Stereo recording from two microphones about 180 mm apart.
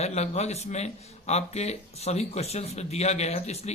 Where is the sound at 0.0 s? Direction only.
40° left (ahead or behind).